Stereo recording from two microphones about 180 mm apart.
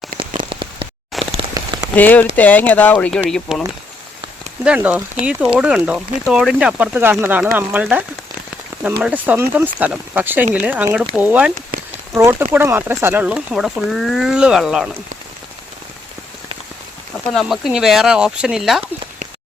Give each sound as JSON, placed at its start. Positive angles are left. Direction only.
{"t": 0.2, "sound": "rain on surface", "side_deg": -30}
{"t": 1.2, "sound": "a sound", "side_deg": -35}
{"t": 1.5, "sound": "rain on surface", "side_deg": -20}
{"t": 2.0, "sound": "speech", "side_deg": 10}
{"t": 4.6, "sound": "speech", "side_deg": -5}
{"t": 9.0, "sound": "speech", "side_deg": -10}
{"t": 17.3, "sound": "speech", "side_deg": 0}